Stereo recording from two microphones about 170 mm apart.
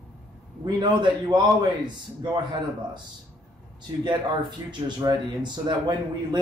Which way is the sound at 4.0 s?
25° right (ahead or behind).